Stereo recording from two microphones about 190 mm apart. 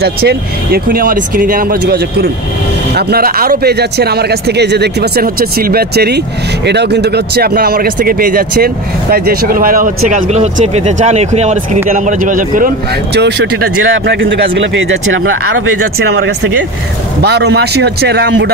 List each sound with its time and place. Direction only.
0.0 s speech: 55° right (ahead or behind); by 14.2 s 80° right
14.3 s speech: 70° right (ahead or behind); by 16.3 s 85° right
17.2 s speech: 60° right (ahead or behind)